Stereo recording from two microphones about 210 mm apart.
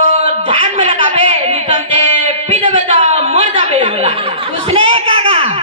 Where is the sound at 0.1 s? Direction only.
30° right (ahead or behind).